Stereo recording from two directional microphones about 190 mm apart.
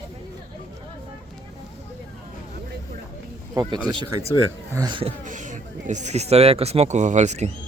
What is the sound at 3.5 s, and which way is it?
Speech, 25° right (ahead or behind).